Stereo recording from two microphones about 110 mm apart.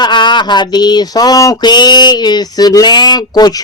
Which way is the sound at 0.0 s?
45° left (ahead or behind).